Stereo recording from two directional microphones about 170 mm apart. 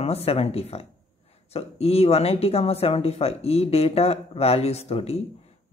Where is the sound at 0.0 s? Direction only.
35° left (ahead or behind).